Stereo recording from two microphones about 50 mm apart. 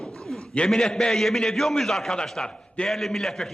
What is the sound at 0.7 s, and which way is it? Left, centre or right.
A man's voice, centre.